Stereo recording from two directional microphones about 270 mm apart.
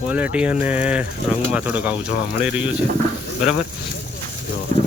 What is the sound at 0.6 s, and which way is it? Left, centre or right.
Speech, centre.